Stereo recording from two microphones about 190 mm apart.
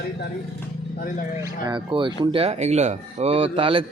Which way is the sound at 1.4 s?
20° right (ahead or behind).